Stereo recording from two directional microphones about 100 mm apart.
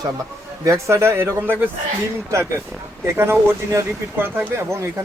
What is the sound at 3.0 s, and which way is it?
Speech, 25° right (ahead or behind).